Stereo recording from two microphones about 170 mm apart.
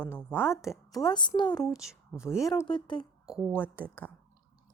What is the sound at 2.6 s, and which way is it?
Speech, 25° left (ahead or behind).